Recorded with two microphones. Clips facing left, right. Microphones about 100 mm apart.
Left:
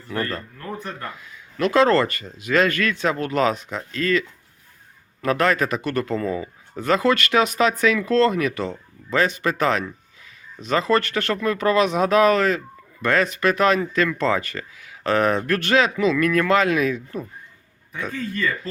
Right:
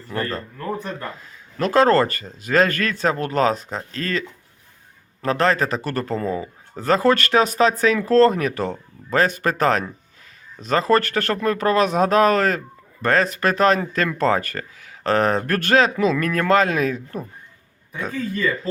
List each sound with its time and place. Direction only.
0.1 s speech: 30° right (ahead or behind)